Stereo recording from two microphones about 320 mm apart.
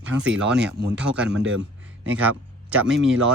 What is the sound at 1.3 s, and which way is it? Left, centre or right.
Speech, right.